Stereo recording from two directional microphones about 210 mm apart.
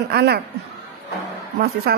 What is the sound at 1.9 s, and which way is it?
Speech, 45° right (ahead or behind).